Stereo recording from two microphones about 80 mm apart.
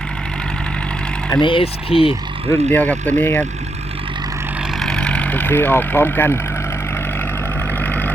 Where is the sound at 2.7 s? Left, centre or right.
Centre.